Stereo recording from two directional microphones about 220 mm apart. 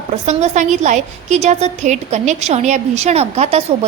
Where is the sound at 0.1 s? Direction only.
30° right (ahead or behind).